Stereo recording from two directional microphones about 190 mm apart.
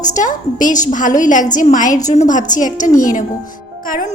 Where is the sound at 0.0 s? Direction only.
40° left (ahead or behind).